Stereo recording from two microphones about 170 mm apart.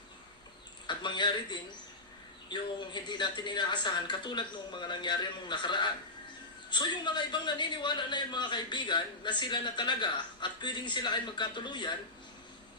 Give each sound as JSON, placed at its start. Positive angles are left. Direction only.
{"t": 0.9, "sound": "a man's voice", "side_deg": 25}